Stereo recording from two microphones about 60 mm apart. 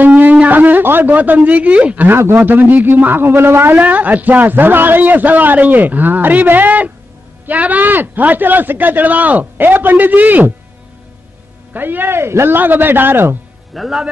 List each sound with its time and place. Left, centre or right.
0.0 s a sound: right
0.5 s speech: right
2.0 s speech: right
3.8 s a man's voice: right
11.7 s speech: right
13.7 s speech: centre